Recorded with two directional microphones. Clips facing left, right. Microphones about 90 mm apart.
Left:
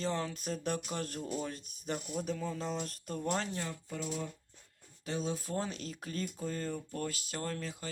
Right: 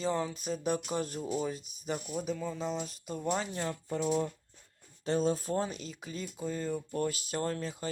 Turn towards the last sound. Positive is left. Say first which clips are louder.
# right 5 dB
turn(degrees=-20)  # may be behind; listen again after turning